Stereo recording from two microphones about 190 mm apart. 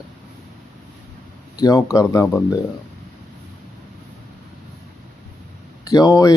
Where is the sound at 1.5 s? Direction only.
20° left (ahead or behind).